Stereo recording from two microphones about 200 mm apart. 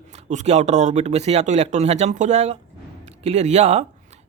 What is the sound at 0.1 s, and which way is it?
A man's voice, 35° right (ahead or behind).